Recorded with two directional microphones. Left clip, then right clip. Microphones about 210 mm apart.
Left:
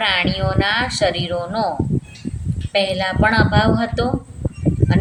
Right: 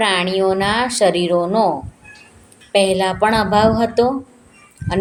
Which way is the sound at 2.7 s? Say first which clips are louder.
Right 3 dB; 20° right (ahead or behind).